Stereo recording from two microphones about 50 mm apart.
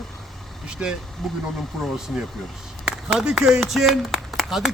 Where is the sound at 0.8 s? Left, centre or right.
Right.